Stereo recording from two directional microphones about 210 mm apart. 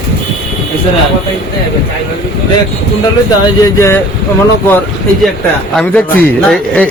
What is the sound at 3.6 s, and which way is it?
Speech, 15° left (ahead or behind).